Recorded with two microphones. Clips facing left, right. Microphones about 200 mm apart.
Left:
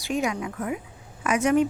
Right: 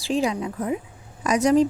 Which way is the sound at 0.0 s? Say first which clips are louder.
Right 3 dB; 30° right (ahead or behind).